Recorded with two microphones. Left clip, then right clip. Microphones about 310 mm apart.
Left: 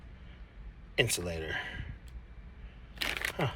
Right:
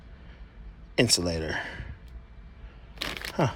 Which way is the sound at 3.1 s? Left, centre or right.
Centre.